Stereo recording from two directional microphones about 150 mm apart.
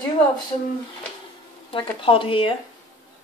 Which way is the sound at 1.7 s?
35° left (ahead or behind).